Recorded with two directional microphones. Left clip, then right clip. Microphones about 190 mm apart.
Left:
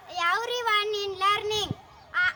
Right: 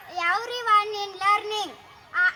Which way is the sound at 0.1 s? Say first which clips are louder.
Right 1 dB; 25° left (ahead or behind).